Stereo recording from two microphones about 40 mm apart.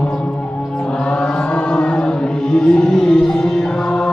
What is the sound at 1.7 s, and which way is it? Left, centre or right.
Music, left.